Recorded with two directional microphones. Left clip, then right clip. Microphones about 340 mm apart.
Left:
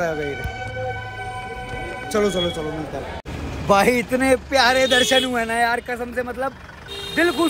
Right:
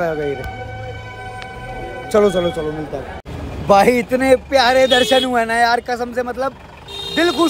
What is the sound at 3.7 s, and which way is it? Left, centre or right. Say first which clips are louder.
A man's voice: right 5 dB; centre.